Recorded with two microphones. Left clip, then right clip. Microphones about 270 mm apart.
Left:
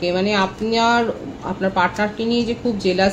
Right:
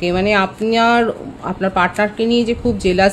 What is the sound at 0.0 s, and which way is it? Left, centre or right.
Speech, right.